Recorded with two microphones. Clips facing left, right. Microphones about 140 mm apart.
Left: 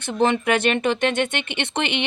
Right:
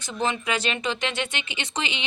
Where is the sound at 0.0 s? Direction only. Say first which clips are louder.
Left 7 dB; 60° left (ahead or behind).